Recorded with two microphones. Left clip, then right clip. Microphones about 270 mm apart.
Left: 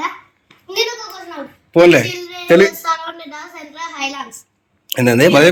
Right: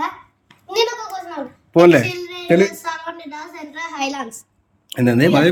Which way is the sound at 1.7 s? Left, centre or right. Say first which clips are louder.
Left 2 dB; centre.